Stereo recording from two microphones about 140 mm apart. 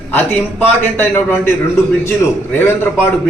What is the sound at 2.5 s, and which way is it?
Speech, 15° left (ahead or behind).